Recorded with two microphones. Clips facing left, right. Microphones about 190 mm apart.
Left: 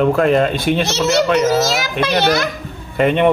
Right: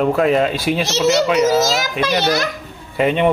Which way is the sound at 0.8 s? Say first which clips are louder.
Even; 60° left (ahead or behind).